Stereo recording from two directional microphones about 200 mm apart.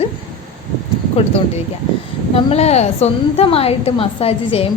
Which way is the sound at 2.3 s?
30° left (ahead or behind).